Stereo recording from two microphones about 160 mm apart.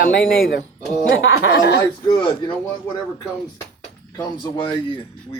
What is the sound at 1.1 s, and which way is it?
Speech, 90° left.